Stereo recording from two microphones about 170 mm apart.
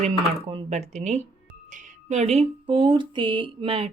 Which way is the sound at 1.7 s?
45° right (ahead or behind).